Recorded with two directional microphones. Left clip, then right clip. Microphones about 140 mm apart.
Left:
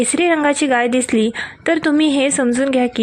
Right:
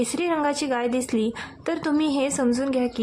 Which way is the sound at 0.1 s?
35° left (ahead or behind).